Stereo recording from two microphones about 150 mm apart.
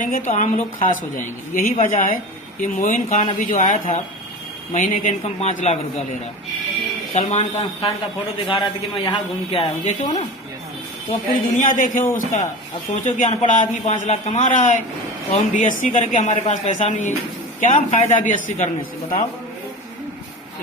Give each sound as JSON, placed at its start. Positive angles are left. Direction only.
{"t": 0.0, "sound": "a man's voice", "side_deg": 65}
{"t": 7.1, "sound": "speech", "side_deg": 45}
{"t": 8.5, "sound": "speech", "side_deg": 35}
{"t": 11.3, "sound": "a man's voice", "side_deg": 65}
{"t": 12.1, "sound": "a man's voice", "side_deg": 55}